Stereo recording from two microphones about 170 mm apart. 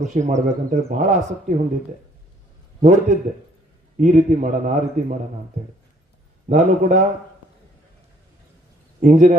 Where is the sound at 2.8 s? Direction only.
45° right (ahead or behind).